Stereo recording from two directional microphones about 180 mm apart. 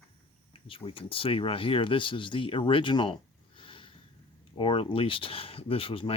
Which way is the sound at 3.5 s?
30° left (ahead or behind).